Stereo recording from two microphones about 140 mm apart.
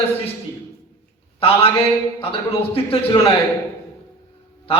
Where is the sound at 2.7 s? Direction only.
40° left (ahead or behind).